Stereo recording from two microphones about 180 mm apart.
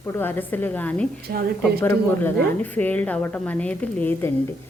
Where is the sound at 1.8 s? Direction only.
10° left (ahead or behind).